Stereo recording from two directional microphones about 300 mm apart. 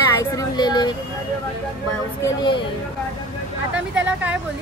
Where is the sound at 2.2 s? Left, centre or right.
Centre.